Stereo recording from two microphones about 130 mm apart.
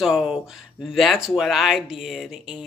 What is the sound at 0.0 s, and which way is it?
Speech, 5° right (ahead or behind).